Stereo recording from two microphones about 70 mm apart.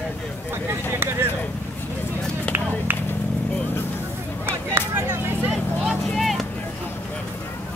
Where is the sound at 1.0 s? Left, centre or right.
Right.